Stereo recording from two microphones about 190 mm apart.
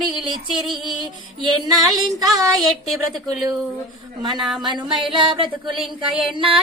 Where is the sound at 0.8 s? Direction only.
20° right (ahead or behind).